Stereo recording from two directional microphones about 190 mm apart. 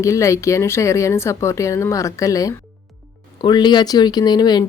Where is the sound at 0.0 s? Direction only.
15° left (ahead or behind).